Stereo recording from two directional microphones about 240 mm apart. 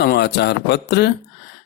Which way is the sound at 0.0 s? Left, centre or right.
Left.